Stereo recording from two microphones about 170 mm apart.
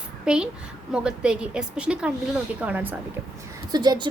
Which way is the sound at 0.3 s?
5° right (ahead or behind).